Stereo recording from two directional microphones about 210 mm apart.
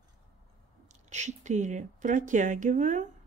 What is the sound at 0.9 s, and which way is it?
Speech, 35° right (ahead or behind).